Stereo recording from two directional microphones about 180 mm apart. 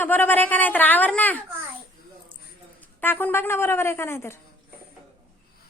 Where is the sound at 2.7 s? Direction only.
10° left (ahead or behind).